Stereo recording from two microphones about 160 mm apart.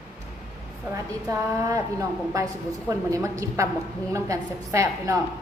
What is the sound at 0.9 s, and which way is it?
A woman's voice, 20° right (ahead or behind).